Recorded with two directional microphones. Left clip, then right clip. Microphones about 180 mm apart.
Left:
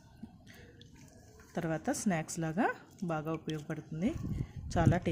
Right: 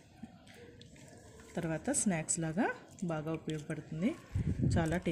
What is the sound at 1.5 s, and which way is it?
Speech, 15° left (ahead or behind).